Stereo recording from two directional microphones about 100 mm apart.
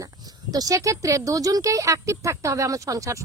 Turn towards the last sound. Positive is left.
turn(degrees=-35)  # may be behind; listen again after turning